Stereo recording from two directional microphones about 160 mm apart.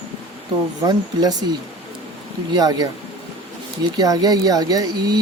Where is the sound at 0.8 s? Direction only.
25° right (ahead or behind).